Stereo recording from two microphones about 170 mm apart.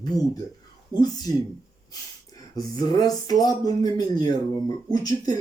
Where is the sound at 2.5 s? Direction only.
25° left (ahead or behind).